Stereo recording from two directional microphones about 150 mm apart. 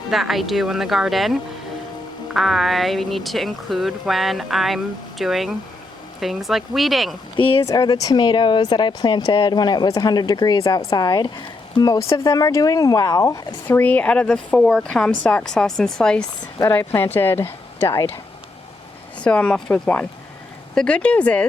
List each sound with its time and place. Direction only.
0.1 s speech: centre (ahead or behind)
7.3 s speech: 35° left (ahead or behind)
7.7 s speech: 25° left (ahead or behind)
13.7 s speech: 10° left (ahead or behind)
19.2 s speech: 10° left (ahead or behind)